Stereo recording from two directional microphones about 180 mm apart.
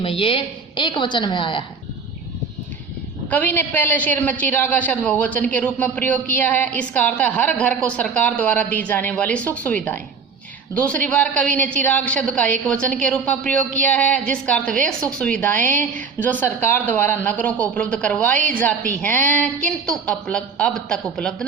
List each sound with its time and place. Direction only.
0.0 s a woman's voice: 30° left (ahead or behind)
3.2 s a woman's voice: 10° left (ahead or behind)